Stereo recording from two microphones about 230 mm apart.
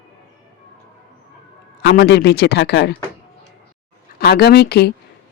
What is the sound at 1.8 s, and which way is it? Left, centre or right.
Speech, left.